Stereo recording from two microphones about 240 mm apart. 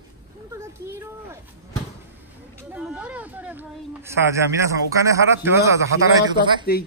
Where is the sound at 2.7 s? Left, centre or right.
Centre.